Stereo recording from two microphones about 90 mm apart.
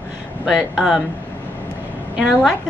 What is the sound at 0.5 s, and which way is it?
Speech, 5° right (ahead or behind).